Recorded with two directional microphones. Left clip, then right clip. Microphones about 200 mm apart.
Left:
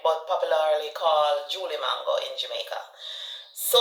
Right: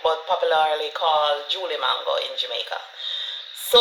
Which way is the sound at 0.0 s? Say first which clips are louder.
Right 3 dB; 50° right (ahead or behind).